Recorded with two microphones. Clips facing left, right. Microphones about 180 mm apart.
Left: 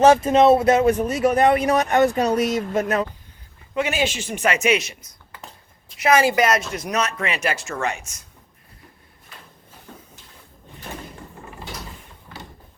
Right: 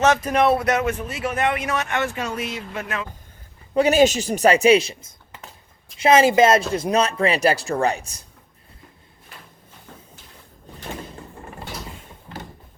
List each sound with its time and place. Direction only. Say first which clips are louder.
0.0 s speech: left 4 dB; 30° left (ahead or behind)
0.9 s speech: left 7 dB; 40° left (ahead or behind)
3.8 s speech: right 7 dB; 40° right (ahead or behind)